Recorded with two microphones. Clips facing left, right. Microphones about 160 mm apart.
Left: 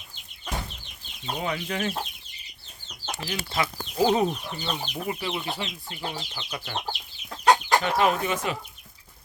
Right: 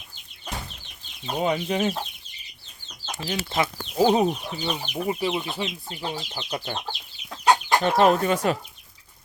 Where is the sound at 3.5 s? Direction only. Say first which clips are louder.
Right 2 dB; 25° right (ahead or behind).